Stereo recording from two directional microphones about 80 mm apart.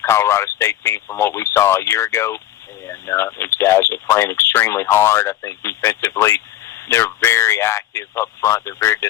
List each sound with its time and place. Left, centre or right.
0.0 s speech: left